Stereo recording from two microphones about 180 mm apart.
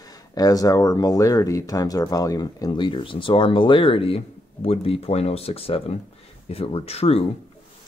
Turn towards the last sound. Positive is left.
turn(degrees=35)  # may be behind; listen again after turning